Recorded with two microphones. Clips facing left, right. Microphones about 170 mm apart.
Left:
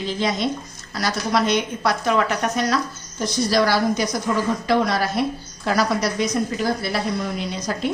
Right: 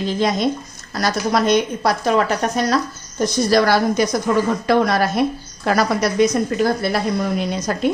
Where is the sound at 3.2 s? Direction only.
55° right (ahead or behind).